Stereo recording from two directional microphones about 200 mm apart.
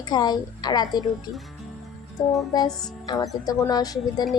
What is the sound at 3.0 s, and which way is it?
A woman's voice, 20° left (ahead or behind).